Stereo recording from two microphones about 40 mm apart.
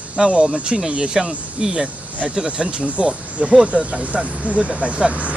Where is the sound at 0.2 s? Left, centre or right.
Centre.